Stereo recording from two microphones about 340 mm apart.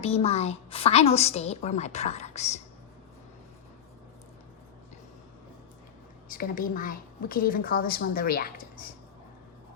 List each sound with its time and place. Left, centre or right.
0.0 s a woman's voice: centre
6.3 s a woman's voice: left